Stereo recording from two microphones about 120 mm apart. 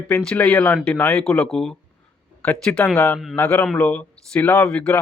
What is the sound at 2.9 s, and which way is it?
Speech, 20° left (ahead or behind).